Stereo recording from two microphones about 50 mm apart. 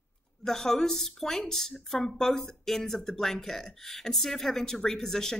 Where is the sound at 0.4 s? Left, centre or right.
Centre.